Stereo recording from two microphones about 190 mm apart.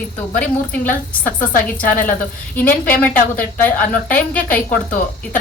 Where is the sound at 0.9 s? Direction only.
45° left (ahead or behind).